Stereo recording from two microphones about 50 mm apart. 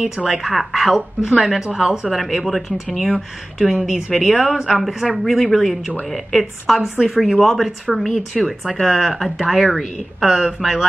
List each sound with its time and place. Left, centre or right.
0.0 s speech: right
0.4 s speech: centre
1.7 s speech: centre
2.0 s speech: centre